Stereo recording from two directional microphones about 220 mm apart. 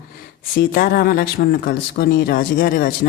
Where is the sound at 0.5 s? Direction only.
40° left (ahead or behind).